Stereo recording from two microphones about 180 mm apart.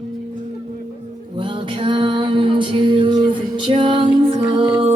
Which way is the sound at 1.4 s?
30° right (ahead or behind).